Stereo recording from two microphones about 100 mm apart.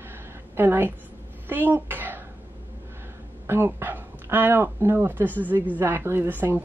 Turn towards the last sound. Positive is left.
turn(degrees=-20)  # may be behind; listen again after turning